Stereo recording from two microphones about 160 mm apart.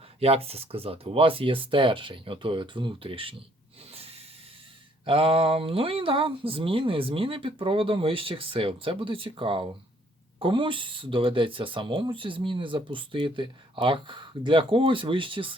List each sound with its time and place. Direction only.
0.2 s speech: 40° right (ahead or behind)
3.9 s hiss: 40° right (ahead or behind)
5.0 s speech: 35° right (ahead or behind)